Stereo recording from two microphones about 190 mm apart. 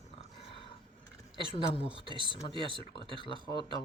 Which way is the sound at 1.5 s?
30° left (ahead or behind).